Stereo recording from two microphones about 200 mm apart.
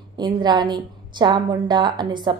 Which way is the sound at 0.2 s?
20° right (ahead or behind).